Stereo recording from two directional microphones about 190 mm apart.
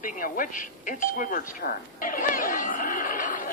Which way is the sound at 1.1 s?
45° left (ahead or behind).